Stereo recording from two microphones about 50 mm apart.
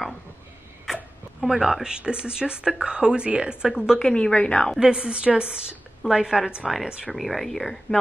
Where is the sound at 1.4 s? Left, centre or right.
Centre.